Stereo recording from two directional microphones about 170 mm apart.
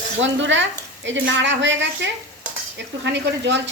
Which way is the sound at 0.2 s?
90° right.